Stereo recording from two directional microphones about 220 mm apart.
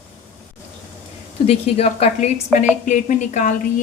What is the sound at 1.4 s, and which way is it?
Speech, 25° left (ahead or behind).